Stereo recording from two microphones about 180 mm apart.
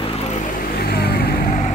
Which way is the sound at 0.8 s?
60° left (ahead or behind).